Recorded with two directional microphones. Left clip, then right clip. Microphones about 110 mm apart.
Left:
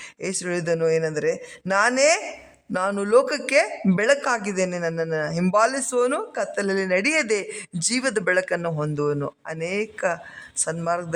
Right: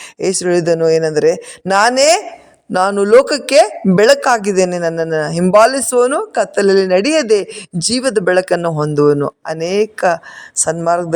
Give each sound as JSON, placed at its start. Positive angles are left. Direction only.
{"t": 0.2, "sound": "a man's voice", "side_deg": -40}
{"t": 3.9, "sound": "a man's voice", "side_deg": -50}